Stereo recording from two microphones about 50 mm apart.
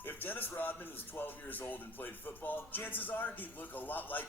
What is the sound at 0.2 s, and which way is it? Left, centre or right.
Speech, left.